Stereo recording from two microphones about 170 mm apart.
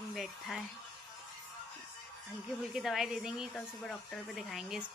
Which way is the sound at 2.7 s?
Centre (ahead or behind).